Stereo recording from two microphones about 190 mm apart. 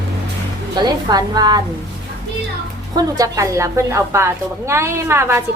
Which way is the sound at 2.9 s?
20° right (ahead or behind).